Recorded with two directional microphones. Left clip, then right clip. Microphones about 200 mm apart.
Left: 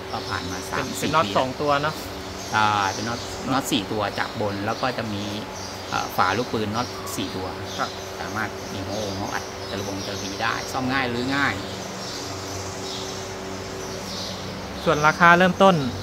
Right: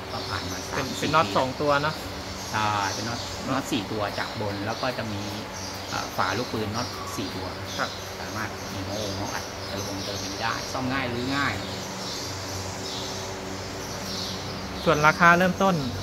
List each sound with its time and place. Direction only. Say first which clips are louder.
1.1 s speech: left 1 dB; 5° left (ahead or behind)
2.5 s speech: left 5 dB; 60° left (ahead or behind)
6.1 s speech: left 5 dB; 65° left (ahead or behind)
10.4 s speech: left 4 dB; 65° left (ahead or behind)
14.9 s speech: left 2 dB; 5° left (ahead or behind)